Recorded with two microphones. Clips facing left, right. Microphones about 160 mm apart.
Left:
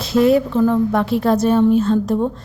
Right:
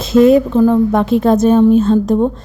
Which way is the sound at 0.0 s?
20° right (ahead or behind).